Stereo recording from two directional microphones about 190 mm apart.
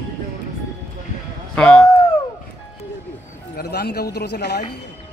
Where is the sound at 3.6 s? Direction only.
60° left (ahead or behind).